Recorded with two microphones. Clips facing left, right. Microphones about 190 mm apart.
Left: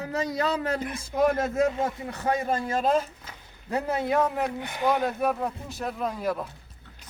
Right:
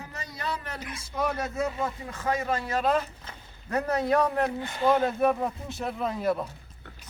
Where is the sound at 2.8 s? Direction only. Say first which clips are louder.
Left 1 dB; 10° left (ahead or behind).